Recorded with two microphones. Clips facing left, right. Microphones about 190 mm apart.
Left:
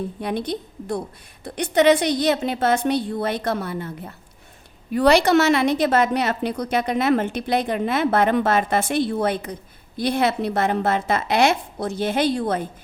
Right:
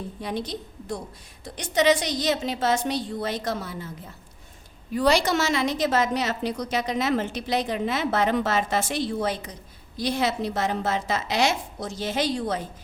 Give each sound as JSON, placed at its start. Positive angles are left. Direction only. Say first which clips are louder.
{"t": 0.2, "sound": "a woman's voice", "louder": "left 3 dB", "side_deg": 60}